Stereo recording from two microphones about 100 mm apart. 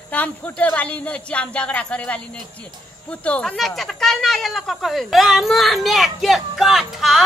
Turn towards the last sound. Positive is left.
turn(degrees=0)  # may be behind; listen again after turning